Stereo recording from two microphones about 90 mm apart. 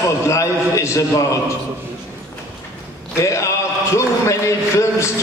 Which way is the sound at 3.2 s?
35° left (ahead or behind).